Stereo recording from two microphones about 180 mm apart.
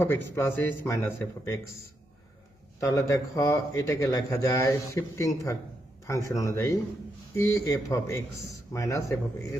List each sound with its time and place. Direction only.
0.0 s speech: 10° left (ahead or behind)
2.8 s speech: 20° left (ahead or behind)